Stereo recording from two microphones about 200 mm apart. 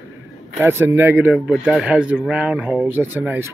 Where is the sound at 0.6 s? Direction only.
10° right (ahead or behind).